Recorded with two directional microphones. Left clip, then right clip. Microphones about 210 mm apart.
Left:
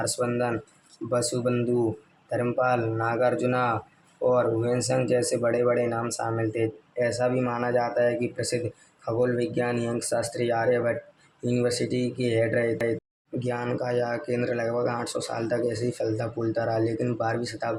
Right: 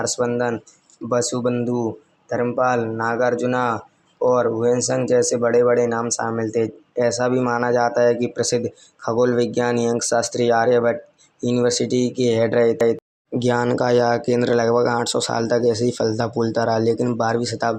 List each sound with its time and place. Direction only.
0.0 s speech: 15° right (ahead or behind)